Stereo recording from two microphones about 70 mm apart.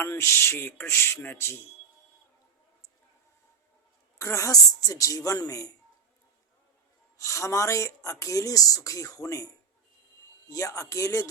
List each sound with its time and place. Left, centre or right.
0.0 s speech: left
4.2 s speech: left
7.2 s speech: left
10.5 s speech: left